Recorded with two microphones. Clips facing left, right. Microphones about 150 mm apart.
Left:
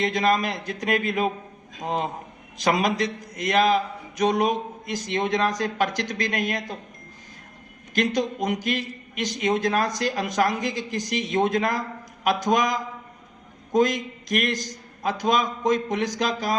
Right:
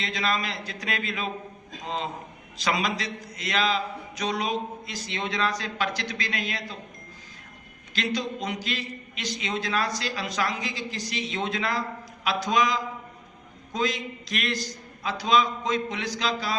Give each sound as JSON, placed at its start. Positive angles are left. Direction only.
{"t": 0.0, "sound": "a woman's voice", "side_deg": 50}
{"t": 7.9, "sound": "a woman's voice", "side_deg": 50}